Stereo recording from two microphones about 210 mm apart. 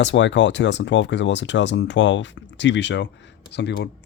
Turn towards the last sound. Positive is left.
turn(degrees=55)  # may be behind; listen again after turning